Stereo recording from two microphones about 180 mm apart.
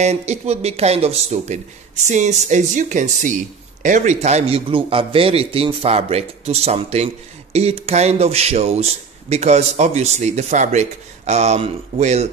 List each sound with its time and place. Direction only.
0.0 s speech: 40° right (ahead or behind)